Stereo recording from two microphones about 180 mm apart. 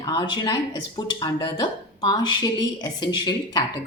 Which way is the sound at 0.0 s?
20° left (ahead or behind).